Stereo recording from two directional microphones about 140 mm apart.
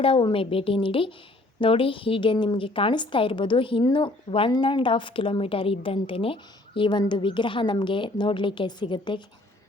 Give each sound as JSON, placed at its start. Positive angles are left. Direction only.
{"t": 0.0, "sound": "a woman's voice", "side_deg": 40}